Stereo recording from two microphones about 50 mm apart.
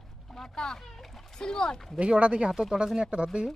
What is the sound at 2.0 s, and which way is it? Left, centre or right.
Speech, right.